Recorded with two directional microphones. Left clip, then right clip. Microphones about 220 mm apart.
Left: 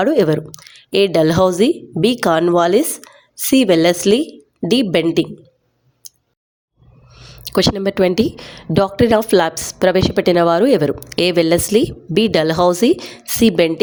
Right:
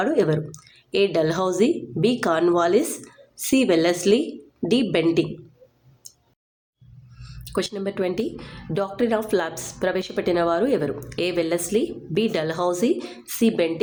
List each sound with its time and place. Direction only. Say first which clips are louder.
0.0 s a woman's voice: left 7 dB; 35° left (ahead or behind)
7.2 s a woman's voice: left 10 dB; 35° left (ahead or behind)